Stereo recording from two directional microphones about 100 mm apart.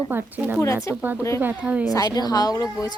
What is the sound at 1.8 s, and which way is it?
A woman's voice, 35° left (ahead or behind).